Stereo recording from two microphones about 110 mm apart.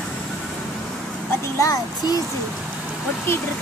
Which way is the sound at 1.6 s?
30° left (ahead or behind).